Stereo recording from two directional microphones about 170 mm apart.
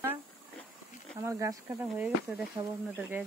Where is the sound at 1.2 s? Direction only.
15° right (ahead or behind).